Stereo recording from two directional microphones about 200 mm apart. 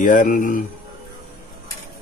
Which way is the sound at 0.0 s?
40° left (ahead or behind).